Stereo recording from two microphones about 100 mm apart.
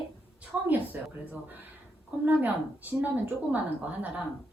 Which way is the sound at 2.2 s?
20° right (ahead or behind).